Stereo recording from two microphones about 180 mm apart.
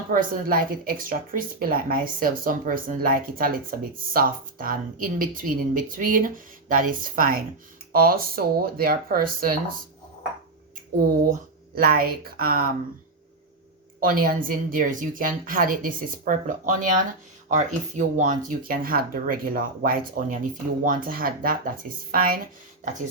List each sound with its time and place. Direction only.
0.1 s speech: 50° right (ahead or behind)
11.3 s speech: 55° right (ahead or behind)
14.0 s speech: 50° right (ahead or behind)
22.8 s a sound: 45° right (ahead or behind)